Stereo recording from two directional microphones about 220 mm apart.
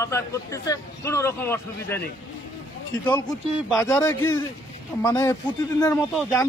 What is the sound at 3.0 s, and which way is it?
A man's voice, 10° left (ahead or behind).